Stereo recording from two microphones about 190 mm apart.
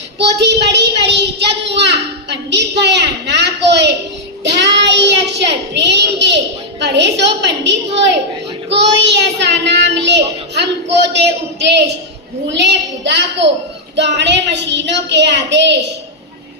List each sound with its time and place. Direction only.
0.2 s a child's voice: 65° right (ahead or behind)
12.5 s a child's voice: 65° right (ahead or behind)